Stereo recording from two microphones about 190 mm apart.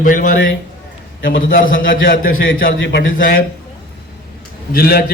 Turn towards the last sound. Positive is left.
turn(degrees=55)  # may be behind; listen again after turning